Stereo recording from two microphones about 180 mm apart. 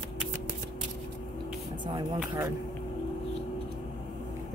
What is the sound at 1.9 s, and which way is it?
Speech, 20° right (ahead or behind).